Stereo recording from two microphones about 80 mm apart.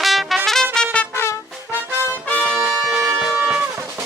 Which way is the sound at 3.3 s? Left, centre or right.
Right.